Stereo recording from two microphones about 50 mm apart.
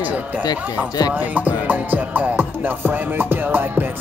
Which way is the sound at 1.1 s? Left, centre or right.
Right.